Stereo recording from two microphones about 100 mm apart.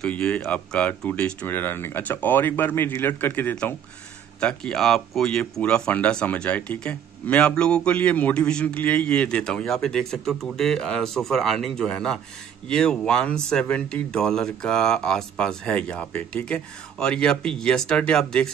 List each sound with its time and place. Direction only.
0.0 s speech: 10° left (ahead or behind)
4.4 s speech: 10° left (ahead or behind)